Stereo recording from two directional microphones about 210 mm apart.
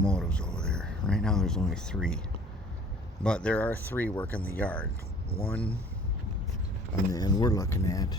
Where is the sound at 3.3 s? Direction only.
5° left (ahead or behind).